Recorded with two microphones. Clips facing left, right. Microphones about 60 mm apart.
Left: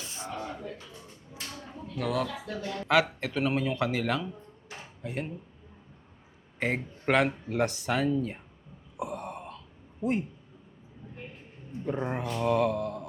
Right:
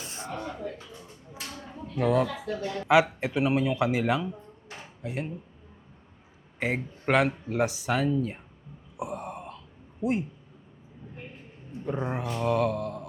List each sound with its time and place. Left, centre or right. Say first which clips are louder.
0.0 s a sound: right 1 dB; right
2.0 s speech: right 6 dB; centre
6.6 s speech: right 1 dB; centre
9.0 s a sound: right 1 dB; centre
10.0 s speech: right 1 dB; centre
11.7 s speech: even; centre